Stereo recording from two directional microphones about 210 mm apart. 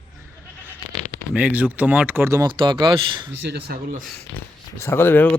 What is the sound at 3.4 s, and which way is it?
Speech, 55° right (ahead or behind).